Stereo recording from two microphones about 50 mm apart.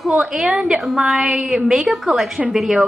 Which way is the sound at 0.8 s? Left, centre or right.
Centre.